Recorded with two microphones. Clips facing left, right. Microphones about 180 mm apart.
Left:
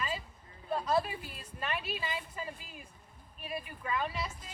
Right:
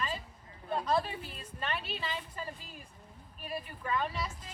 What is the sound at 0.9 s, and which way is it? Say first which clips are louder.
Speech: left 1 dB; 5° left (ahead or behind).